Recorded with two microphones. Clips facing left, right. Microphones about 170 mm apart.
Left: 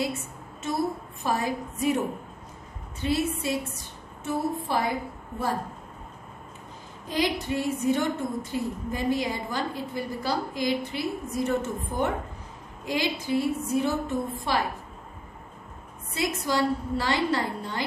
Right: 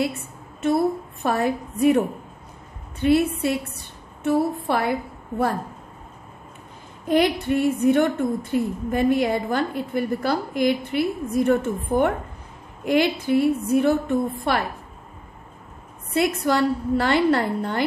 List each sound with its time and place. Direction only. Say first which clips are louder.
1.2 s a woman's voice: right 5 dB; 60° right (ahead or behind)
3.0 s a woman's voice: right 8 dB; 60° right (ahead or behind)
7.1 s a woman's voice: right 7 dB; 60° right (ahead or behind)
16.2 s a woman's voice: right 6 dB; 60° right (ahead or behind)